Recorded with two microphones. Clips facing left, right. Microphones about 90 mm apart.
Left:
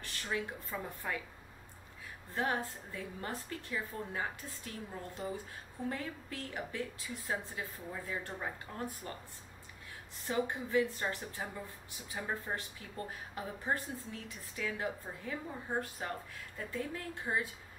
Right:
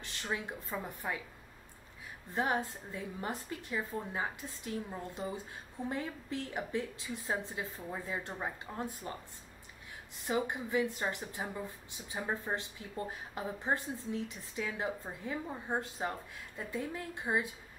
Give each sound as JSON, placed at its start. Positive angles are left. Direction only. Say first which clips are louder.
{"t": 0.0, "sound": "a woman's voice", "louder": "even", "side_deg": -20}
{"t": 2.3, "sound": "a woman's voice", "louder": "right 2 dB", "side_deg": -20}
{"t": 10.2, "sound": "a woman's voice", "louder": "right 1 dB", "side_deg": -15}